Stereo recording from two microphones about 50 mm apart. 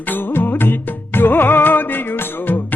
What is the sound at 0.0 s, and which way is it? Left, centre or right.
Music, left.